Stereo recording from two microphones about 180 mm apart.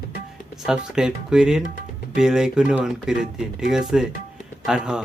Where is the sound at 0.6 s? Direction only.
5° right (ahead or behind).